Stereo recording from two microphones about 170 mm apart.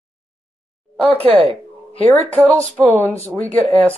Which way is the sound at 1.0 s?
35° right (ahead or behind).